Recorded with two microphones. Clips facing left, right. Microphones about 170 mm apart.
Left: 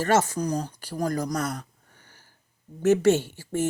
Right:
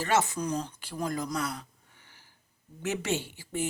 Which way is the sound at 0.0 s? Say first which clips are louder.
Left 5 dB; 40° left (ahead or behind).